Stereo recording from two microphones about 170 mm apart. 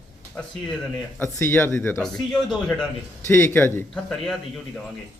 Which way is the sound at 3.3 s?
15° left (ahead or behind).